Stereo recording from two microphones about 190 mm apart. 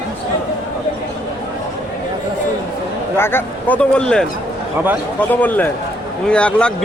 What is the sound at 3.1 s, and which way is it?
A man's voice, 10° left (ahead or behind).